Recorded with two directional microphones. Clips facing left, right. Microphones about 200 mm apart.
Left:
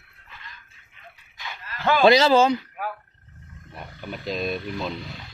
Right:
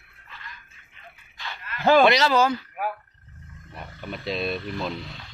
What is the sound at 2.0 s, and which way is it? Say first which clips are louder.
Speech: left 4 dB; 30° left (ahead or behind).